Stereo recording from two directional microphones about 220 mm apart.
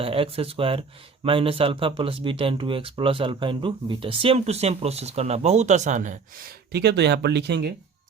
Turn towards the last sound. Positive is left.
turn(degrees=-50)  # may be behind; listen again after turning